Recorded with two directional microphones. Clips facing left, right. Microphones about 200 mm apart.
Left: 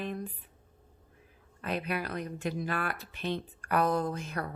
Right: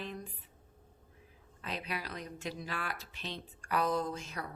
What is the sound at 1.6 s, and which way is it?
Speech, 55° left (ahead or behind).